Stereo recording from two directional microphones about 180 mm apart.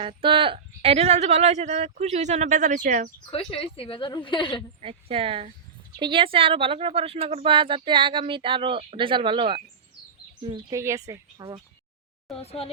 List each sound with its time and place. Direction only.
0.0 s speech: 30° right (ahead or behind); by 3.1 s 45° right (ahead or behind)
3.2 s speech: 30° left (ahead or behind)
4.8 s speech: 30° right (ahead or behind)
12.4 s speech: 35° left (ahead or behind)